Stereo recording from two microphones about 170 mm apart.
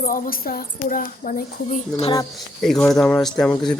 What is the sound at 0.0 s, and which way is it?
Speech, 55° left (ahead or behind).